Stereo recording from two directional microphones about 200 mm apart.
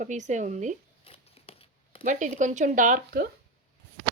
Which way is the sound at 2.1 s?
40° right (ahead or behind).